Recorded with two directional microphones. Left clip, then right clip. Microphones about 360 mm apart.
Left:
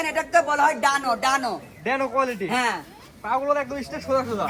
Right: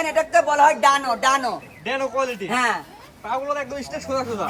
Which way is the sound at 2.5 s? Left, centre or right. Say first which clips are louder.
Right 4 dB; right.